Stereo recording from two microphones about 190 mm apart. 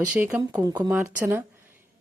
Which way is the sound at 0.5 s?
20° right (ahead or behind).